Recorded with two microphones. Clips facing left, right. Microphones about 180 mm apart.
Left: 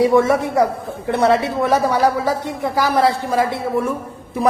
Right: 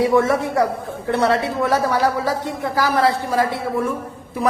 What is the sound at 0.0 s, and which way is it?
A woman's voice, 20° left (ahead or behind).